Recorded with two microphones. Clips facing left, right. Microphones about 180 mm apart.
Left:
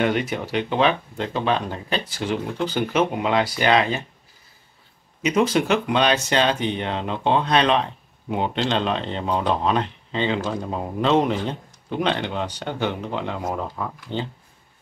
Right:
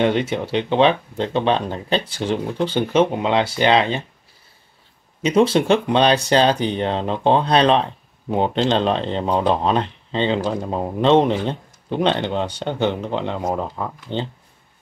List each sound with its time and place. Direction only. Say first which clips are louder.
0.0 s speech: right 3 dB; 25° right (ahead or behind)
5.2 s speech: right 4 dB; 30° right (ahead or behind)